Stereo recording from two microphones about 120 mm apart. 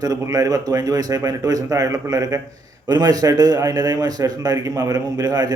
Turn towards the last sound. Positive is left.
turn(degrees=-30)  # may be behind; listen again after turning